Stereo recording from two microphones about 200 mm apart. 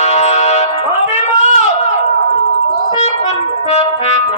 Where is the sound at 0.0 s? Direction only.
30° left (ahead or behind).